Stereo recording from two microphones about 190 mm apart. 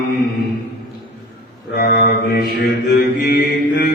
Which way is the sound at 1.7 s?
50° left (ahead or behind).